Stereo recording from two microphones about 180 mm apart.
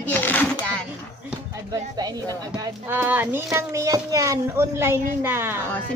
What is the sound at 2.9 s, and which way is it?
Speech, 10° right (ahead or behind).